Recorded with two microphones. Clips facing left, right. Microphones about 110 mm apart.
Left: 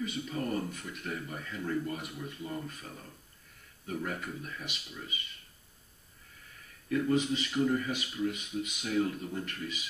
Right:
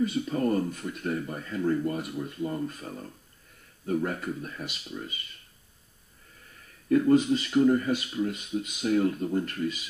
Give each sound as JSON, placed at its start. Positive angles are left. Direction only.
{"t": 0.0, "sound": "speech", "side_deg": -40}
{"t": 6.9, "sound": "speech", "side_deg": -40}